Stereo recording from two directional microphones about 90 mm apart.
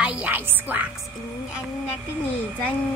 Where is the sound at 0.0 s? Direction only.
15° right (ahead or behind).